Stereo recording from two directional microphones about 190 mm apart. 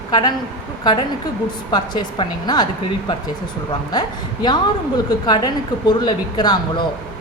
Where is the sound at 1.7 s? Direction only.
20° left (ahead or behind).